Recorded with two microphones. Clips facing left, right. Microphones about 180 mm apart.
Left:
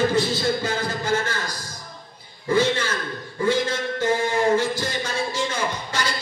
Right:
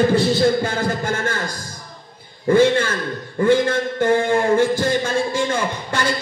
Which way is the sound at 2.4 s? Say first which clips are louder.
Right 6 dB; 50° right (ahead or behind).